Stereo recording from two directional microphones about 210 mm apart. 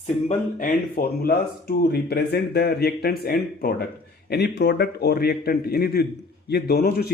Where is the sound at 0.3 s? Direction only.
40° left (ahead or behind).